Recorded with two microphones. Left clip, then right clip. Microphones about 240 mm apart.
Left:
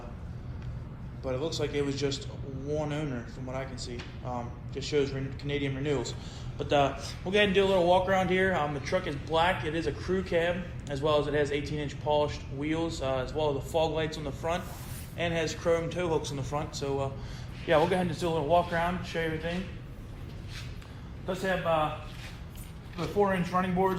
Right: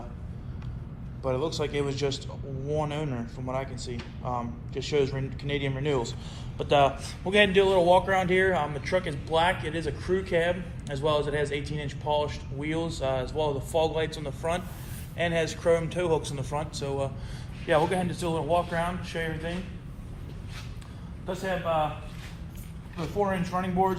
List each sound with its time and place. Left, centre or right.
1.4 s speech: right
4.7 s a man's voice: right
21.2 s speech: right
23.0 s speech: right